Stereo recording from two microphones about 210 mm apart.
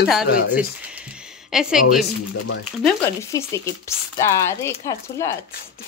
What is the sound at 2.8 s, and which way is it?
Speech, 10° left (ahead or behind).